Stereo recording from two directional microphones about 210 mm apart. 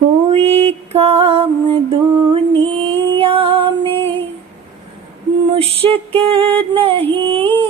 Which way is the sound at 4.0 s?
10° left (ahead or behind).